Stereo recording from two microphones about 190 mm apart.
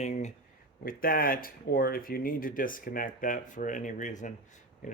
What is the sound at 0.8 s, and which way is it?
Speech, 50° left (ahead or behind).